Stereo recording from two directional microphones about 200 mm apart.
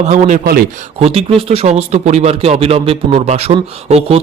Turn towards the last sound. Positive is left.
turn(degrees=-30)  # may be behind; listen again after turning